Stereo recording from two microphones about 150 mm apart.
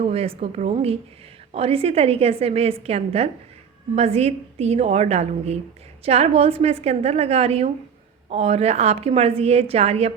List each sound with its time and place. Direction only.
0.0 s a woman's voice: 40° right (ahead or behind)